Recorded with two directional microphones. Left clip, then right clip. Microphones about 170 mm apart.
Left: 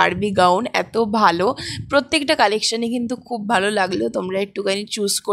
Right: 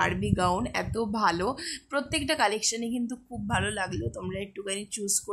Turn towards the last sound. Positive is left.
turn(degrees=40)  # may be behind; listen again after turning